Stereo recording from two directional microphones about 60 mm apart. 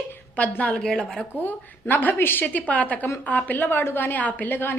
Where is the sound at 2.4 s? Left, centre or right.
Left.